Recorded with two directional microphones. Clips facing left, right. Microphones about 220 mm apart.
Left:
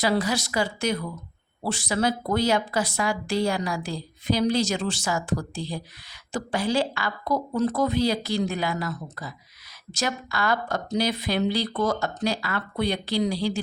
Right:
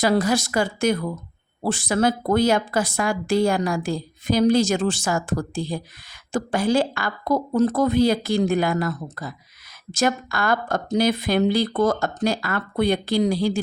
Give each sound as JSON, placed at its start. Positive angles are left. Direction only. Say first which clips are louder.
{"t": 0.0, "sound": "speech", "louder": "right 4 dB", "side_deg": -45}